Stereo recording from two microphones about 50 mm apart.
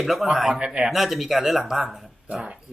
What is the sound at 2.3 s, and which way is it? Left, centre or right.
Speech, centre.